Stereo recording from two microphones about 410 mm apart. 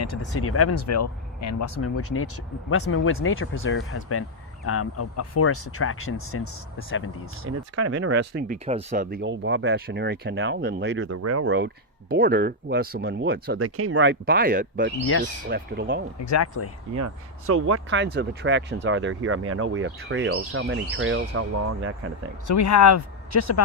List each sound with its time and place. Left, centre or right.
0.0 s speech: left
7.4 s speech: right
16.2 s speech: left
16.9 s speech: right
22.4 s speech: left